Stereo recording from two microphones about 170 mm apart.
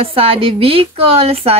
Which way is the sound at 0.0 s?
35° right (ahead or behind).